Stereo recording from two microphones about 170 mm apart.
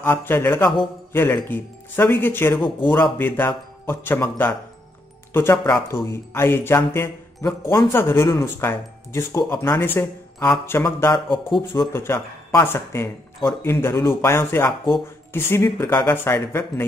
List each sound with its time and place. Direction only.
0.0 s speech: 10° left (ahead or behind)